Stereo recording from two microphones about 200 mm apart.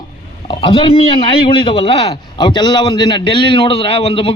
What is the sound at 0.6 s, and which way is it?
A man's voice, 25° left (ahead or behind).